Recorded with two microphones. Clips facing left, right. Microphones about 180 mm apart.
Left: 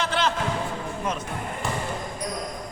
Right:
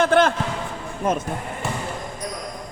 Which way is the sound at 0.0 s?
50° right (ahead or behind).